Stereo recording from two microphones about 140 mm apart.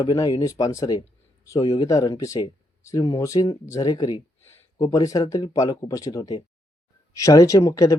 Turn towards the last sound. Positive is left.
turn(degrees=25)  # may be behind; listen again after turning